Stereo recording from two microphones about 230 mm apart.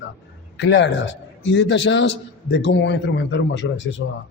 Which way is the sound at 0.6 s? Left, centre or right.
Left.